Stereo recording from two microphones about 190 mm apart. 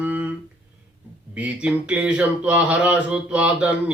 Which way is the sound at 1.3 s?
5° right (ahead or behind).